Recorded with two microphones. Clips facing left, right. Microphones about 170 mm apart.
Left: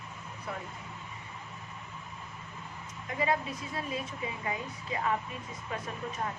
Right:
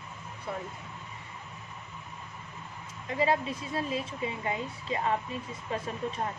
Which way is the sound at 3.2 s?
30° right (ahead or behind).